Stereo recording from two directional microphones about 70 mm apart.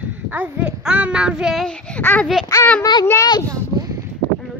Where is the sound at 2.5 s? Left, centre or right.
Left.